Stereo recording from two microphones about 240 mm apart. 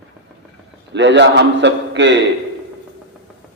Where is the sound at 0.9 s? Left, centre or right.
Right.